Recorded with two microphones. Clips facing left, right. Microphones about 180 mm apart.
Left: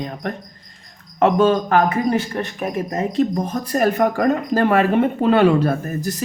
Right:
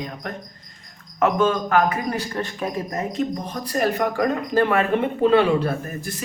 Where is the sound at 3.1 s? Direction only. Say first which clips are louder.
Left 6 dB; 45° left (ahead or behind).